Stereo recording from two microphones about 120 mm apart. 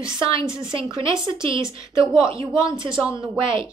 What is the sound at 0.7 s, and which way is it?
A woman's voice, 45° right (ahead or behind).